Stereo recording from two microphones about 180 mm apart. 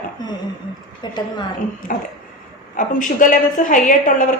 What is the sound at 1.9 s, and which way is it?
A woman's voice, 45° left (ahead or behind).